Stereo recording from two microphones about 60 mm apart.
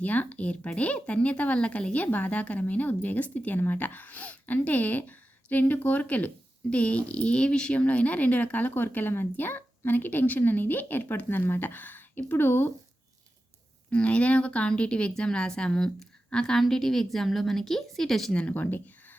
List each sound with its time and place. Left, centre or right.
0.0 s speech: left
13.9 s a woman's voice: left
18.3 s speech: left